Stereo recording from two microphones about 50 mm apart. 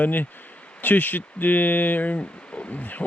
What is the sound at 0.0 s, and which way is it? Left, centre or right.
Speech, left.